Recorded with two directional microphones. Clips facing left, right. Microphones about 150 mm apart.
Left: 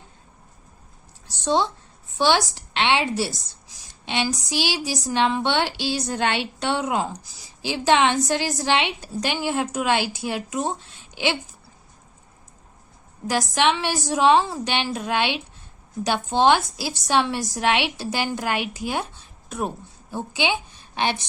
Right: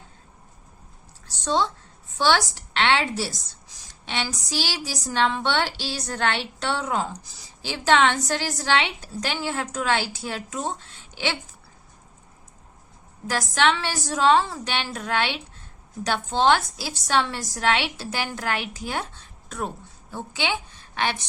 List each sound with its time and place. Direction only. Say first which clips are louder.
2.1 s a woman's voice: left 1 dB; 15° left (ahead or behind)
2.8 s a woman's voice: left 1 dB; 5° left (ahead or behind)
4.2 s a sound: left 4 dB; 20° left (ahead or behind)
5.1 s a woman's voice: left 1 dB; 15° left (ahead or behind)
13.2 s a woman's voice: left 1 dB; 15° left (ahead or behind)